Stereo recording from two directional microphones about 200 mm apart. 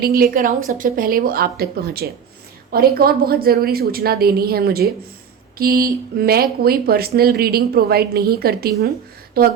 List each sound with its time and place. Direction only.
0.0 s speech: 45° right (ahead or behind)